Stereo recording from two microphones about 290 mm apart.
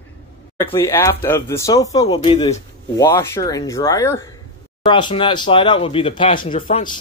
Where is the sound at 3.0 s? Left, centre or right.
Centre.